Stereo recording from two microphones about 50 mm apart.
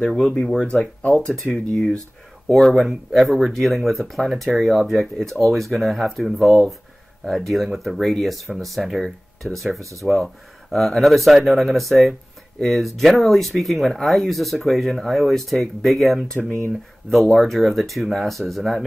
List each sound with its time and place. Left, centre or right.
0.0 s speech: centre
0.7 s speech: left
1.2 s speech: centre
9.8 s speech: right
10.1 s speech: centre